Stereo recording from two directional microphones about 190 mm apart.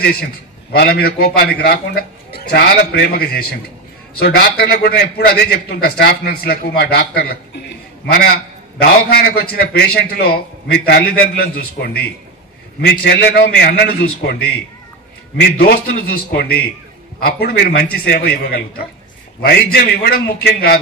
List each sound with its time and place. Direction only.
0.0 s a man's voice: 55° left (ahead or behind)
15.6 s a man's voice: 55° left (ahead or behind)